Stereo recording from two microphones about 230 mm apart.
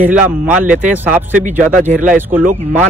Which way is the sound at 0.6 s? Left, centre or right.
Right.